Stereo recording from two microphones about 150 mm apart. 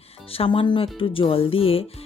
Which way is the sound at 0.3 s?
40° left (ahead or behind).